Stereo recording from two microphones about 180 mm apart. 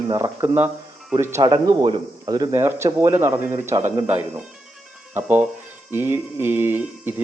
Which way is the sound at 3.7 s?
25° right (ahead or behind).